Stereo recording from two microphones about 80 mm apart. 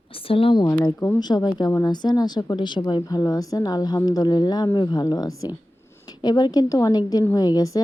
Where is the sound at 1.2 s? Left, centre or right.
Left.